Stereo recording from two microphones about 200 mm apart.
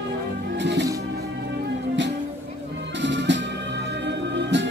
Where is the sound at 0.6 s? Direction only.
60° right (ahead or behind).